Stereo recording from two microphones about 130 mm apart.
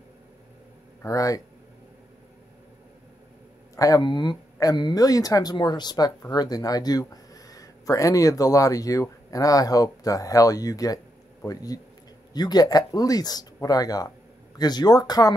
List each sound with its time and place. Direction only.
1.0 s speech: 25° left (ahead or behind)
3.7 s speech: 30° left (ahead or behind)